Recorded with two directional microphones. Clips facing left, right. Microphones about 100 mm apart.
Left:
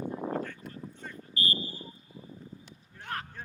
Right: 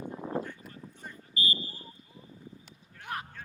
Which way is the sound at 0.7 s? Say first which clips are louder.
Left 3 dB; 15° right (ahead or behind).